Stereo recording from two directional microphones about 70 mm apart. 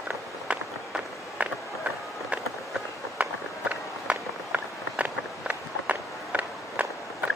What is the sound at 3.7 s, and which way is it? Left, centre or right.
Run, right.